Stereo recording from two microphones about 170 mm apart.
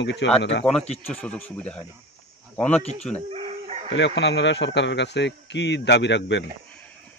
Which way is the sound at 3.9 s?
90° left.